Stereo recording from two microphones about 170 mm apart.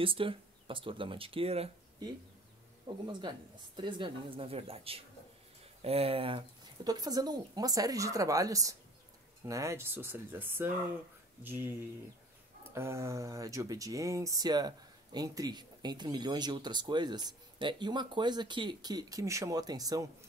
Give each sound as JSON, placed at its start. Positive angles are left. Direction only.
{"t": 0.0, "sound": "speech", "side_deg": -30}
{"t": 3.1, "sound": "speech", "side_deg": -25}
{"t": 12.7, "sound": "speech", "side_deg": -15}